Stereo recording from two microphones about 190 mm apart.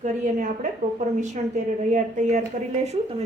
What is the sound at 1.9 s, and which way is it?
Speech, 40° right (ahead or behind).